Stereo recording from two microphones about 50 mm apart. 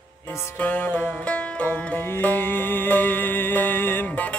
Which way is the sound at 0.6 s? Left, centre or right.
Left.